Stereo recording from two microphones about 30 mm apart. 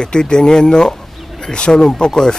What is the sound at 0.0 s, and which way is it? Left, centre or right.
Speech, left.